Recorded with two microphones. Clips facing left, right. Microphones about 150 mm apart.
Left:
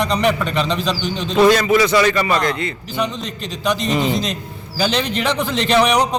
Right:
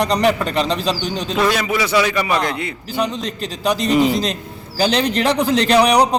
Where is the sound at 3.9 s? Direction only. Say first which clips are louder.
Right 6 dB; 10° right (ahead or behind).